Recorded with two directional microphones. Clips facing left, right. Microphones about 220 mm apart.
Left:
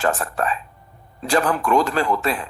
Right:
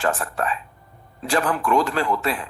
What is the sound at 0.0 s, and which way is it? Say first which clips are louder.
Speech: left 2 dB; 40° left (ahead or behind).